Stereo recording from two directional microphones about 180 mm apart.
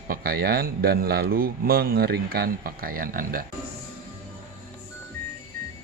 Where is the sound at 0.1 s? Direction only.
60° right (ahead or behind).